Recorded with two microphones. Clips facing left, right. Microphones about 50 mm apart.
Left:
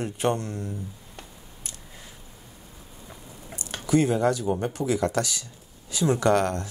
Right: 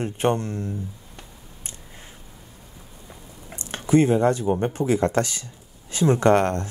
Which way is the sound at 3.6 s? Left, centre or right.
Right.